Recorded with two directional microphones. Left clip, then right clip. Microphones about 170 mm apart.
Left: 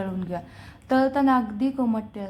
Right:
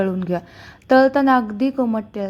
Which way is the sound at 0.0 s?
25° right (ahead or behind).